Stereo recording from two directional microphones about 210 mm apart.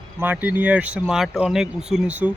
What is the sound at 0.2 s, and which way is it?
A man's voice, 10° right (ahead or behind).